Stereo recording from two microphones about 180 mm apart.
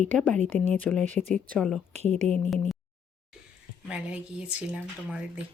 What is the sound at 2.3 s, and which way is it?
Speech, centre (ahead or behind).